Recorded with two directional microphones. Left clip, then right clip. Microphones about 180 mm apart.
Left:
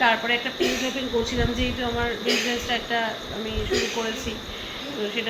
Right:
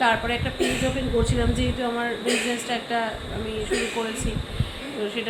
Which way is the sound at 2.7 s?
20° right (ahead or behind).